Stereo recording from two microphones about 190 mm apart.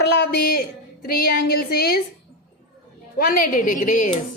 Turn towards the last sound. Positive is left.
turn(degrees=45)  # may be behind; listen again after turning